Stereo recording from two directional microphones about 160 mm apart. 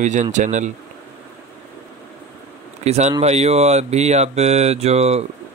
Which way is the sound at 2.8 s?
45° right (ahead or behind).